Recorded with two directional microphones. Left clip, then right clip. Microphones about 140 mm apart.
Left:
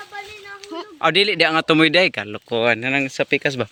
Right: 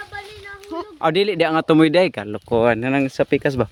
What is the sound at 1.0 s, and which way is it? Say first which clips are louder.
Speech: left 2 dB; 35° right (ahead or behind).